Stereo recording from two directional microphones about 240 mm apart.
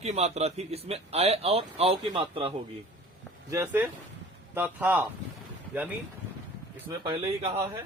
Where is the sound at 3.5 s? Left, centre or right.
Centre.